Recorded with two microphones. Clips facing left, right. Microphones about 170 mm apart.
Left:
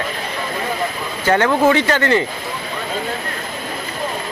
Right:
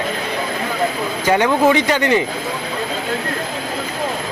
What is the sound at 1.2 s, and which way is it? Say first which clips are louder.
Speech: even; 15° right (ahead or behind).